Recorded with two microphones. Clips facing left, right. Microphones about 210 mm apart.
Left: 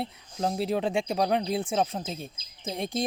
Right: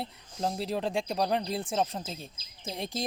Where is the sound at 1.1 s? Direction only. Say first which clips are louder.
Left 3 dB; 60° left (ahead or behind).